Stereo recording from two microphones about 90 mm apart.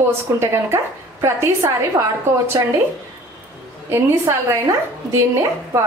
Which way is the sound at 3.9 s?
30° right (ahead or behind).